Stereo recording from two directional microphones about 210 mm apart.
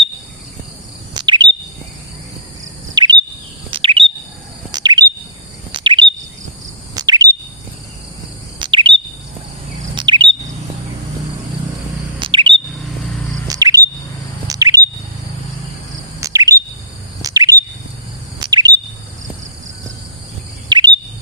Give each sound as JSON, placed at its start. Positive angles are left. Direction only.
{"t": 1.1, "sound": "bird vocalization", "side_deg": -20}
{"t": 2.9, "sound": "bird vocalization", "side_deg": -20}
{"t": 3.7, "sound": "chirp", "side_deg": -25}
{"t": 8.5, "sound": "bird vocalization", "side_deg": -20}
{"t": 9.9, "sound": "chirp", "side_deg": -20}
{"t": 12.2, "sound": "chirp", "side_deg": -25}
{"t": 13.5, "sound": "bird", "side_deg": -15}
{"t": 16.2, "sound": "bird vocalization", "side_deg": -15}
{"t": 17.2, "sound": "chirp", "side_deg": -15}
{"t": 20.7, "sound": "chirp", "side_deg": -20}